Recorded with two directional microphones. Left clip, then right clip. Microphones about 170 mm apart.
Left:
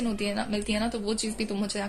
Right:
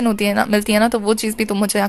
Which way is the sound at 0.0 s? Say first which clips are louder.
Right 13 dB; 30° right (ahead or behind).